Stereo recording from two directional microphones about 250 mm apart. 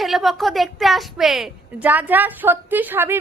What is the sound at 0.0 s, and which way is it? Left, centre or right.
A woman's voice, centre.